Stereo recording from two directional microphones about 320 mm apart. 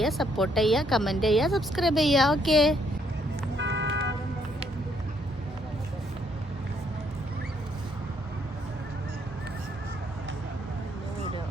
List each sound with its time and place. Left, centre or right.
0.0 s speech: centre
3.6 s vehicle: right